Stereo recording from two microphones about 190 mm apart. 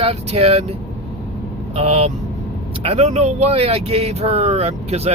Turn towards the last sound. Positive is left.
turn(degrees=-35)  # may be behind; listen again after turning